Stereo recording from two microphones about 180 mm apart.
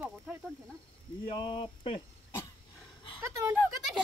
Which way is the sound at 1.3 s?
30° left (ahead or behind).